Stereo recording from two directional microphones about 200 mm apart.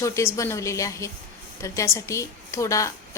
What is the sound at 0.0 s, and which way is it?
A woman's voice, 15° left (ahead or behind).